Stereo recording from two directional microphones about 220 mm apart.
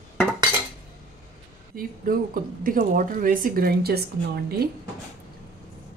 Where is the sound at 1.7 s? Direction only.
40° right (ahead or behind).